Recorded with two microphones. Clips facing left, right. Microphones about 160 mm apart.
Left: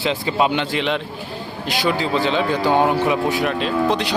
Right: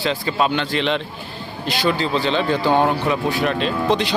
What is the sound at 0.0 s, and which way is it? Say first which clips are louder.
Speech: left 1 dB; 15° left (ahead or behind).